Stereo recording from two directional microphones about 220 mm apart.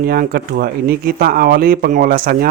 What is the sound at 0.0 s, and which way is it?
Speech, 45° right (ahead or behind).